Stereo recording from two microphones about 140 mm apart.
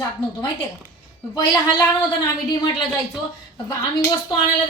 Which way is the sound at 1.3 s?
25° left (ahead or behind).